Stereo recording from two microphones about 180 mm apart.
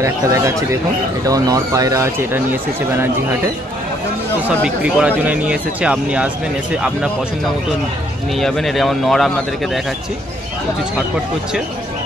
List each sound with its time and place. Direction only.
0.0 s speech: 15° right (ahead or behind)
4.6 s speech: 5° right (ahead or behind)
8.4 s speech: centre (ahead or behind)